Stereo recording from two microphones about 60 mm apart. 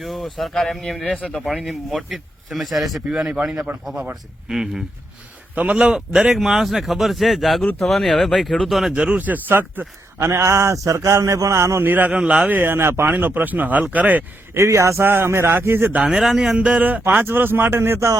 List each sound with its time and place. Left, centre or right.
0.0 s speech: centre
3.1 s speech: centre
5.5 s speech: centre
8.9 s speech: centre
9.1 s speech: right
10.2 s a man's voice: right
11.8 s speech: right
12.1 s speech: centre
12.5 s speech: right
13.1 s speech: right
14.5 s a man's voice: right
15.0 s speech: right
16.0 s speech: centre
16.6 s speech: right